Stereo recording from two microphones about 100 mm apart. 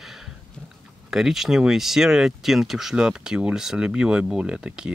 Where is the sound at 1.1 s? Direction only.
5° right (ahead or behind).